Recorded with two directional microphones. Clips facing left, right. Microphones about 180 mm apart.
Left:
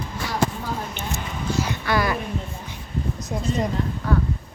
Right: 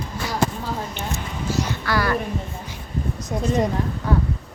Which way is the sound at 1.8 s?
15° left (ahead or behind).